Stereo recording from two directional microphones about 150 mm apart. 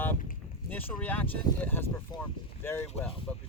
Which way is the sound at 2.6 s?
15° left (ahead or behind).